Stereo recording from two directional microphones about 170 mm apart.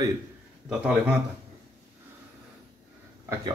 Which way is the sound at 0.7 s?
5° right (ahead or behind).